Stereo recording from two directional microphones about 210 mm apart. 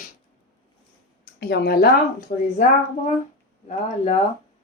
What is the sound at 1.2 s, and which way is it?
Speech, 50° left (ahead or behind).